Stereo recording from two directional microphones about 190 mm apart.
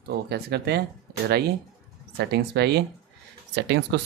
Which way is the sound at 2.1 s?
60° right (ahead or behind).